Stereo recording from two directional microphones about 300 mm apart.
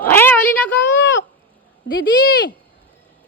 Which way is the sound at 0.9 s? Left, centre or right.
Left.